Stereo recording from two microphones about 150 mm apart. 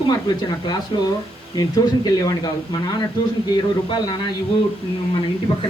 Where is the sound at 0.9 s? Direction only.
30° left (ahead or behind).